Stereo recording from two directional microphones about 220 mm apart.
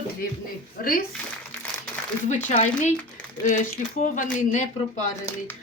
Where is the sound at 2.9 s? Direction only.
5° left (ahead or behind).